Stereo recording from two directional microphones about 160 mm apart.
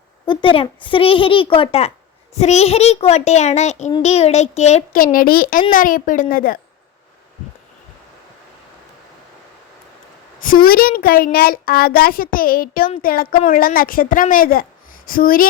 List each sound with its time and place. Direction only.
0.3 s a child's voice: 35° left (ahead or behind); by 6.6 s 60° left (ahead or behind)
10.4 s a child's voice: 65° left (ahead or behind)